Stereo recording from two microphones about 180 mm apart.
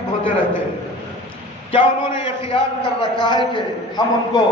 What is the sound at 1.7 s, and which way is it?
A man's voice, 30° left (ahead or behind).